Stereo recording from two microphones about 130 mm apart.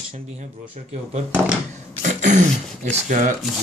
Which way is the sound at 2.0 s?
70° right (ahead or behind).